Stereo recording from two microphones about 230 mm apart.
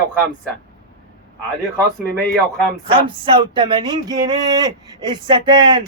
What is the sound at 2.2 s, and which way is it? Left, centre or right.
Speech, centre.